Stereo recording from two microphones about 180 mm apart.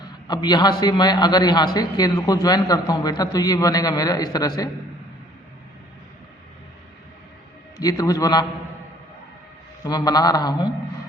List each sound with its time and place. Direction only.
0.3 s a man's voice: 25° left (ahead or behind)
7.8 s a man's voice: 20° left (ahead or behind)
9.8 s a man's voice: 20° left (ahead or behind)